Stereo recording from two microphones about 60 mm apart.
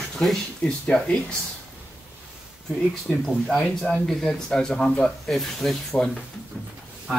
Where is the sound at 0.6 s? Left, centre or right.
Centre.